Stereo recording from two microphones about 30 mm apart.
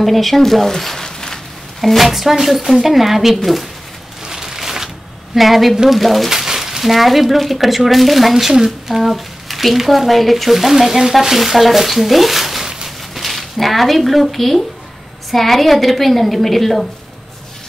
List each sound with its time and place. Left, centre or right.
0.0 s speech: centre
1.8 s a woman's voice: centre
4.2 s a sound: centre
5.3 s speech: centre
6.3 s a sound: centre
6.8 s speech: centre